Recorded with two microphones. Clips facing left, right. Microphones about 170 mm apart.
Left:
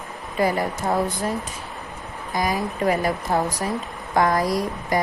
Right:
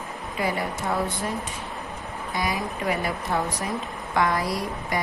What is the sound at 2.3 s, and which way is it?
Speech, 40° left (ahead or behind).